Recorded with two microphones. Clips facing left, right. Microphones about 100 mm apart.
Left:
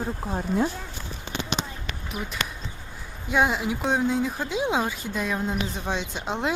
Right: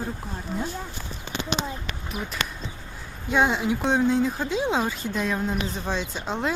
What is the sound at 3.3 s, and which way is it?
Speech, 5° left (ahead or behind).